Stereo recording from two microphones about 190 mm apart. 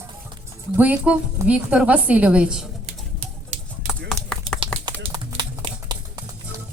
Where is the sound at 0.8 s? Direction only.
10° right (ahead or behind).